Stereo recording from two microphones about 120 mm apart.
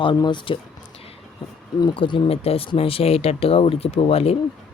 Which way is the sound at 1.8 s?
45° left (ahead or behind).